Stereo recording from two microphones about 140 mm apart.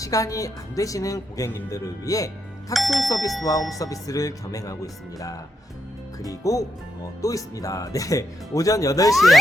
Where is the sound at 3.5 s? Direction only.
25° left (ahead or behind).